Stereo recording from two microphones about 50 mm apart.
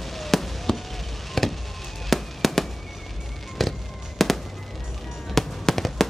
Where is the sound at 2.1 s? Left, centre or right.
Centre.